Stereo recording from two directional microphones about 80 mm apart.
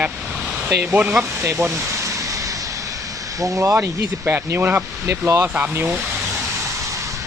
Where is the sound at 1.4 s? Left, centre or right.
Right.